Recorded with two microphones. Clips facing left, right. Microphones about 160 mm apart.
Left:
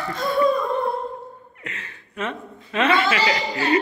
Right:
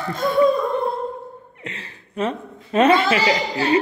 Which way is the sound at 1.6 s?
30° right (ahead or behind).